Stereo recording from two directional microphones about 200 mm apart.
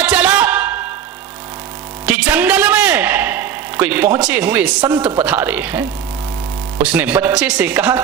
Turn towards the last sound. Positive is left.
turn(degrees=-10)  # may be behind; listen again after turning